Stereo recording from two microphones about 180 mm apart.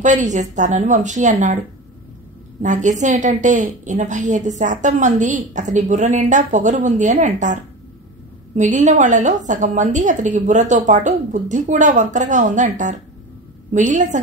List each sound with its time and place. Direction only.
0.0 s a woman's voice: 40° right (ahead or behind)
2.6 s a woman's voice: 45° right (ahead or behind)
8.5 s a woman's voice: 45° right (ahead or behind)